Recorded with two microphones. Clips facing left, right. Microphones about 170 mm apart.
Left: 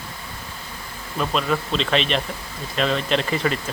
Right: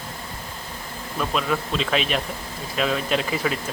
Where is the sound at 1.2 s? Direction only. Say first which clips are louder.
Left 2 dB; centre (ahead or behind).